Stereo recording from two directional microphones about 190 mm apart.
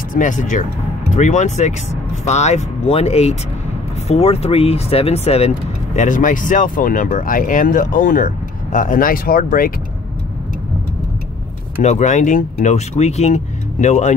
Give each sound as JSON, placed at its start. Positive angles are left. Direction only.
{"t": 0.1, "sound": "speech", "side_deg": 40}
{"t": 11.8, "sound": "speech", "side_deg": 40}